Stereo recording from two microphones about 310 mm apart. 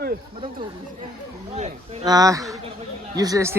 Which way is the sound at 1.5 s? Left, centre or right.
Centre.